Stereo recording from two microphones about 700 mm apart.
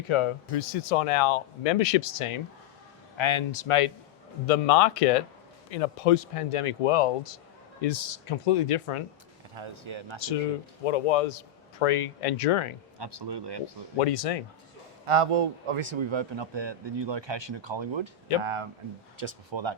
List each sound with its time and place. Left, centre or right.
0.0 s speech: left
9.6 s a man's voice: right
10.8 s speech: left
13.0 s a man's voice: right
14.0 s speech: left
15.0 s a man's voice: right